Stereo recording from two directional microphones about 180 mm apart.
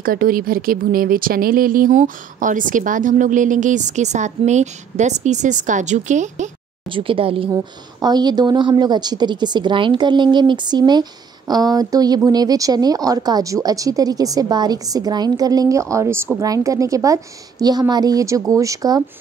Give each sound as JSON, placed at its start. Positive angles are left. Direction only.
{"t": 0.0, "sound": "speech", "side_deg": -55}
{"t": 6.9, "sound": "a woman's voice", "side_deg": -30}